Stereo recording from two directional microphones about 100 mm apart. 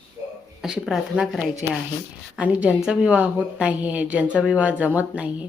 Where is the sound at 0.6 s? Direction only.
5° right (ahead or behind).